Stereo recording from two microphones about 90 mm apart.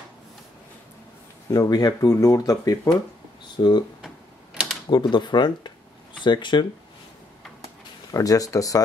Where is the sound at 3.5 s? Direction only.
55° left (ahead or behind).